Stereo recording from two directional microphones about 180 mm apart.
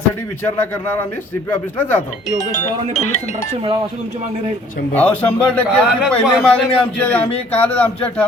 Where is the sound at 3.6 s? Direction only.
30° right (ahead or behind).